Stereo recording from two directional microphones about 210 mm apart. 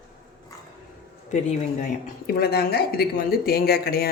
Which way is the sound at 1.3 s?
35° left (ahead or behind).